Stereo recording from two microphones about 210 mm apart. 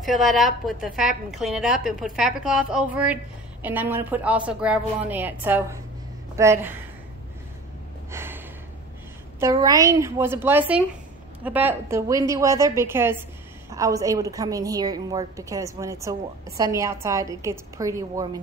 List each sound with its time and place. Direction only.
0.0 s a woman's voice: centre (ahead or behind)
8.1 s a sound: 10° right (ahead or behind)
9.4 s a woman's voice: 15° right (ahead or behind)